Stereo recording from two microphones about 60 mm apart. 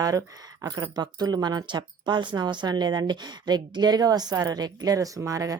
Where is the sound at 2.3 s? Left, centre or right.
Right.